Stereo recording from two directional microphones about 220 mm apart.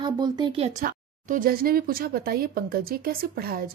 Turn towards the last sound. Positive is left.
turn(degrees=-45)  # may be behind; listen again after turning